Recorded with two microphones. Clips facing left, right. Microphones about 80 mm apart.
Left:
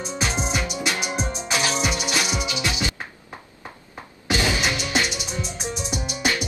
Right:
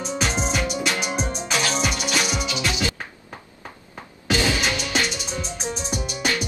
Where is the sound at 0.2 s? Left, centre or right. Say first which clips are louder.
Right 1 dB; centre.